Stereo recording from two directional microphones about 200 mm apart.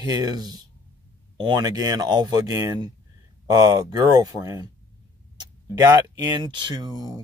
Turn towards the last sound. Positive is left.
turn(degrees=-20)  # may be behind; listen again after turning